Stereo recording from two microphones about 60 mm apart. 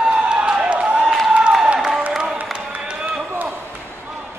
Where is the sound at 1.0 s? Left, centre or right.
Centre.